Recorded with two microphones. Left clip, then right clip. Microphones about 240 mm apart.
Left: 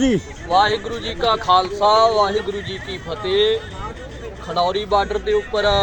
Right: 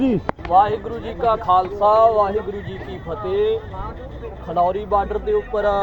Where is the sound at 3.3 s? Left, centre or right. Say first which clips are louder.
Left 2 dB; left.